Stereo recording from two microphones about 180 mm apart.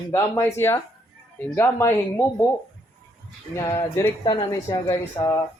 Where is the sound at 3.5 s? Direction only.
15° left (ahead or behind).